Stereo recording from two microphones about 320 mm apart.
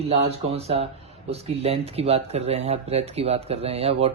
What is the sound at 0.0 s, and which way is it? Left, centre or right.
Speech, centre.